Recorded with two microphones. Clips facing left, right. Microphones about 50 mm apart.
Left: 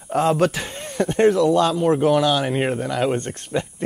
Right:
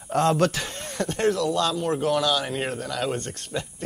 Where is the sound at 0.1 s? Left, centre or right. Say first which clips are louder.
Left 3 dB; centre.